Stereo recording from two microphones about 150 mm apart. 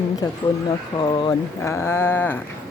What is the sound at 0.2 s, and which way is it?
Speech, 25° left (ahead or behind).